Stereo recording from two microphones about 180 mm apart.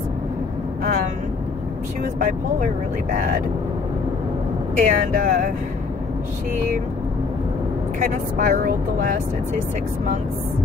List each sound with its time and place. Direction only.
2.1 s speech: 45° right (ahead or behind)
4.7 s speech: 50° right (ahead or behind)
8.0 s speech: 45° right (ahead or behind)